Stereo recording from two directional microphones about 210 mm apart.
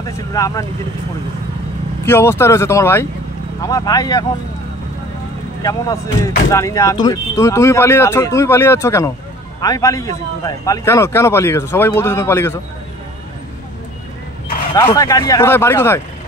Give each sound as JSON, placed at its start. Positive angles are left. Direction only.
{"t": 0.0, "sound": "speech", "side_deg": 15}
{"t": 2.0, "sound": "speech", "side_deg": 10}
{"t": 5.6, "sound": "speech", "side_deg": 15}
{"t": 14.8, "sound": "speech", "side_deg": 15}